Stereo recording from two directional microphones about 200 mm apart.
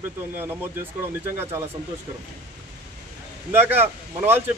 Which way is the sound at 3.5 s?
10° right (ahead or behind).